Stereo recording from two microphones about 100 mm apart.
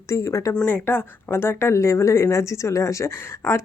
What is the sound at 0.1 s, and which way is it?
Speech, 30° left (ahead or behind).